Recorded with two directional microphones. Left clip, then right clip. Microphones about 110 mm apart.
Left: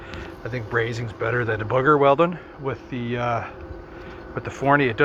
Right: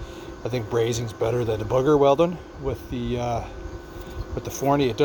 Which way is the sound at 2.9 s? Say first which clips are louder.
Left 1 dB; 30° right (ahead or behind).